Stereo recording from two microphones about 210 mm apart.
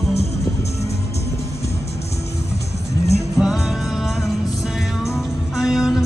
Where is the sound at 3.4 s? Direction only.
5° right (ahead or behind).